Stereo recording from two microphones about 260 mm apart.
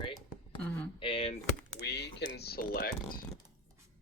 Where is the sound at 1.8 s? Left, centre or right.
Left.